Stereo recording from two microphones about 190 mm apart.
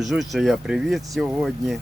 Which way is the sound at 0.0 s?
Centre (ahead or behind).